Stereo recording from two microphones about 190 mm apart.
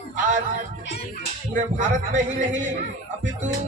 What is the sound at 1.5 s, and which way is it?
Speech, 40° right (ahead or behind).